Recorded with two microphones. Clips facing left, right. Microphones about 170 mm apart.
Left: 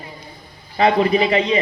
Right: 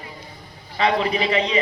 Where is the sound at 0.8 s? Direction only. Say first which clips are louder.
Left 5 dB; 40° left (ahead or behind).